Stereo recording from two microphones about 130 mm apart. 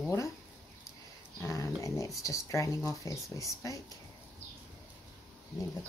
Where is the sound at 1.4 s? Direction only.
25° left (ahead or behind).